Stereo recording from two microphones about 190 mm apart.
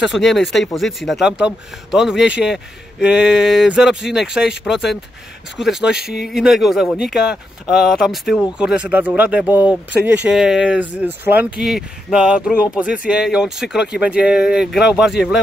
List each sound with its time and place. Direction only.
0.0 s a man's voice: centre (ahead or behind)